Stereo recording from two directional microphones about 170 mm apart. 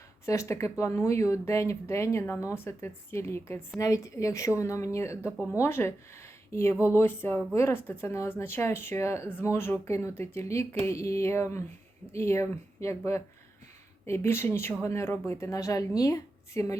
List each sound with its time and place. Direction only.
0.3 s speech: 15° left (ahead or behind)
14.1 s a woman's voice: 15° left (ahead or behind)